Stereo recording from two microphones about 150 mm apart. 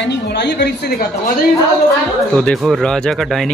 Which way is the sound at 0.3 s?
90° left.